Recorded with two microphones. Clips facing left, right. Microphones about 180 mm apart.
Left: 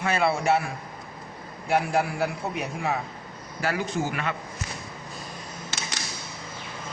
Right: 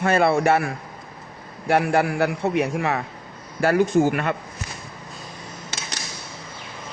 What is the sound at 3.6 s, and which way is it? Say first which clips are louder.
Speech: right 10 dB; 50° right (ahead or behind).